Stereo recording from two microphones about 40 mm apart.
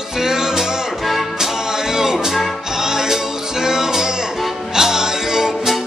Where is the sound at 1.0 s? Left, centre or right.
Centre.